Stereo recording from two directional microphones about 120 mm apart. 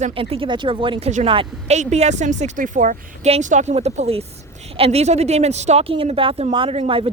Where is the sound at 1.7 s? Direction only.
70° right (ahead or behind).